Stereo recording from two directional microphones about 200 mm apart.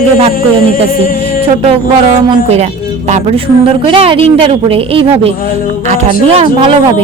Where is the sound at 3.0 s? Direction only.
30° right (ahead or behind).